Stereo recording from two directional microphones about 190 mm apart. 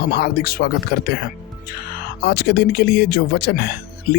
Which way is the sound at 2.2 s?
60° left (ahead or behind).